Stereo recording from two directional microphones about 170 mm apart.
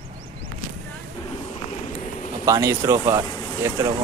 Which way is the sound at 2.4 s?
20° right (ahead or behind).